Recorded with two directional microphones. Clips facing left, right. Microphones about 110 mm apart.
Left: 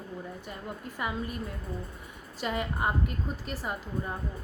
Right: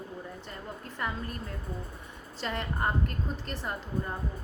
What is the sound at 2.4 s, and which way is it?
A woman's voice, 10° left (ahead or behind).